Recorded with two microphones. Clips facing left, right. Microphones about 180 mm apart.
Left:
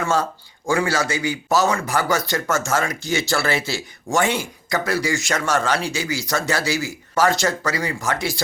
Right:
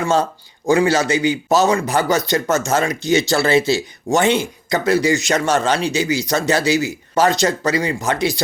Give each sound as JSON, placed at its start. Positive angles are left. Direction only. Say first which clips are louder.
{"t": 0.0, "sound": "speech", "louder": "right 4 dB", "side_deg": -20}